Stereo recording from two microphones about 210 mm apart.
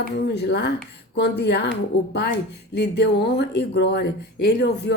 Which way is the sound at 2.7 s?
50° left (ahead or behind).